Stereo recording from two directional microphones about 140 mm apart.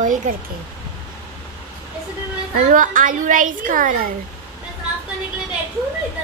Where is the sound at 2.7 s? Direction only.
75° right (ahead or behind).